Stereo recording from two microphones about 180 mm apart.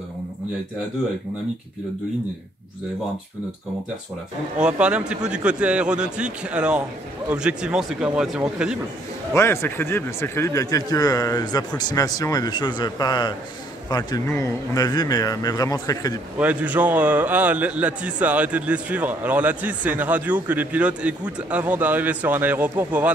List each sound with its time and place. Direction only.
4.6 s speech: 5° right (ahead or behind)
9.3 s a man's voice: 15° left (ahead or behind)
16.3 s a man's voice: 10° right (ahead or behind)